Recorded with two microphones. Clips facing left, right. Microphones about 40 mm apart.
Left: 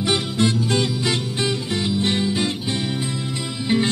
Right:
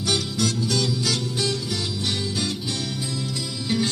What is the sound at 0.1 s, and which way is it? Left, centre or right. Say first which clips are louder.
Music: left 3 dB; left.